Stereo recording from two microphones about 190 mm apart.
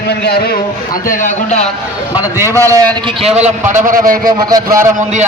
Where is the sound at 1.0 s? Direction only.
45° left (ahead or behind).